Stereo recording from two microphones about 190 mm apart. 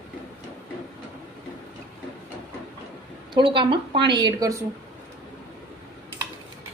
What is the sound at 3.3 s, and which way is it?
A woman's voice, 25° right (ahead or behind).